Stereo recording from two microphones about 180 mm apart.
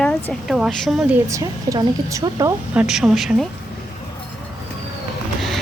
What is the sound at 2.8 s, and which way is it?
Speech, centre (ahead or behind).